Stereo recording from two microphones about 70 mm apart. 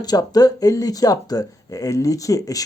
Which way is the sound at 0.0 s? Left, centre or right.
Left.